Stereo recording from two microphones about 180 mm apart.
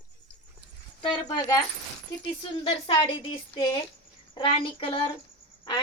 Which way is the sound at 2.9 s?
30° left (ahead or behind).